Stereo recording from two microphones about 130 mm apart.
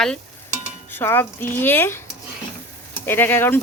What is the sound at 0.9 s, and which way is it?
Speech, 20° left (ahead or behind).